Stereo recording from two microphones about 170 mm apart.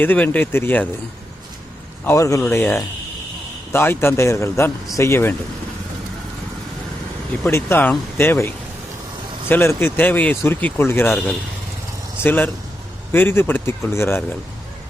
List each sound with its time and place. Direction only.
0.0 s speech: 10° left (ahead or behind)
2.0 s speech: 20° left (ahead or behind)
7.4 s speech: 15° left (ahead or behind)
12.2 s speech: 10° left (ahead or behind)